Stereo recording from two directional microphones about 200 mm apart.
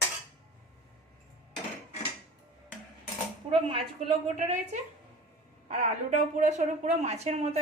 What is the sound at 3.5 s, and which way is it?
Speech, 30° right (ahead or behind).